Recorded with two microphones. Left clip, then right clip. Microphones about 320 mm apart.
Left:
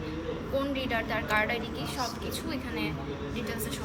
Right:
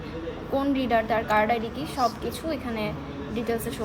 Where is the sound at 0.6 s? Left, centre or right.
Right.